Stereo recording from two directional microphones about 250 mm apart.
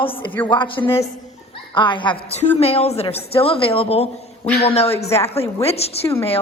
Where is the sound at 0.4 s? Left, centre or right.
Centre.